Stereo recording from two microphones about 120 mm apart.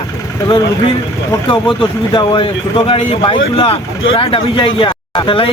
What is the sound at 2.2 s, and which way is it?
Speech, 45° left (ahead or behind).